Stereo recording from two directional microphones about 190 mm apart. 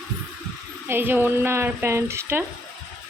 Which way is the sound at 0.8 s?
10° right (ahead or behind).